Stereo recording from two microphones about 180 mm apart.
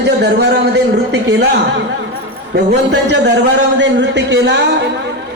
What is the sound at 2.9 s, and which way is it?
A man's voice, 70° right (ahead or behind).